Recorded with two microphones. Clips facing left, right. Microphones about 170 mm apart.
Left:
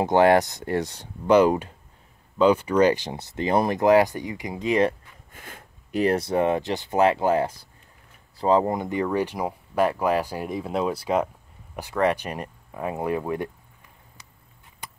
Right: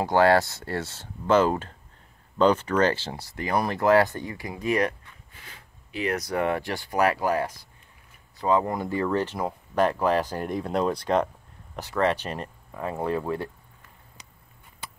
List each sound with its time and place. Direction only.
0.0 s speech: 20° left (ahead or behind)
5.3 s a sound: 50° left (ahead or behind)
6.1 s speech: 25° left (ahead or behind)
8.7 s speech: 20° left (ahead or behind)